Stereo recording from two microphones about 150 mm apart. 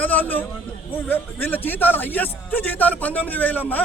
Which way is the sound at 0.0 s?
10° left (ahead or behind).